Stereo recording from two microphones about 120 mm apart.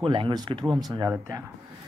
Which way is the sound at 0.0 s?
40° right (ahead or behind).